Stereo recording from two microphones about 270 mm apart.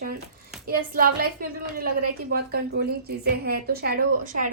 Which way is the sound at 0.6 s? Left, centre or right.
Right.